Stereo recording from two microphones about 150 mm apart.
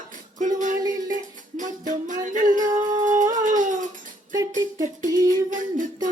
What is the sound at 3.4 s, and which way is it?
Music, 60° right (ahead or behind).